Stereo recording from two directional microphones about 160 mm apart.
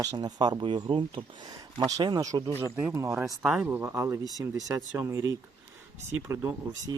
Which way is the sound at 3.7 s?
10° right (ahead or behind).